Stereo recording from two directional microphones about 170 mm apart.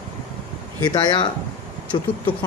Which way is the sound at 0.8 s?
25° left (ahead or behind).